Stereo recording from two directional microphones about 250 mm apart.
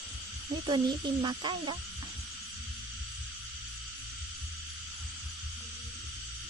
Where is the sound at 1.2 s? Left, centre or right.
Centre.